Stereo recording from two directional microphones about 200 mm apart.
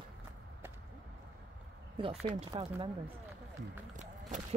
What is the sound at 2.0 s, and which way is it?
Speech, 30° right (ahead or behind).